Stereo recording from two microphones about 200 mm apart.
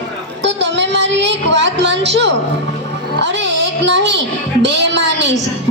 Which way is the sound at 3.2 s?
60° right (ahead or behind).